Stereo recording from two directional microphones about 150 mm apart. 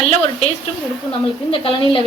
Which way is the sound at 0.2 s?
40° left (ahead or behind).